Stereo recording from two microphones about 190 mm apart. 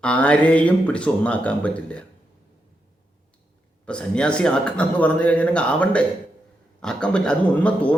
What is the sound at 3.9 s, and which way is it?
A man's voice, 5° left (ahead or behind).